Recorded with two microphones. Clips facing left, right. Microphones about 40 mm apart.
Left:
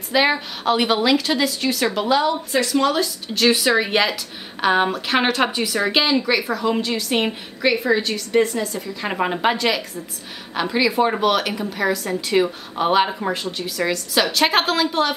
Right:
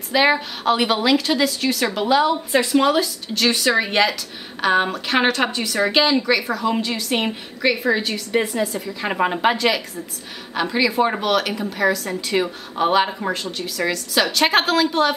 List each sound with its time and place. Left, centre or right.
0.1 s a woman's voice: centre
2.5 s a woman's voice: centre
2.9 s a woman's voice: centre